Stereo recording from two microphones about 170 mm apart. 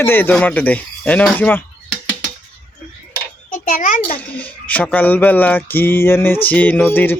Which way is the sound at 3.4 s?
50° left (ahead or behind).